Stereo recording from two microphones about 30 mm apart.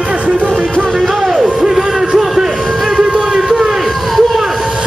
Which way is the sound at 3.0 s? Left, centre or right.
Right.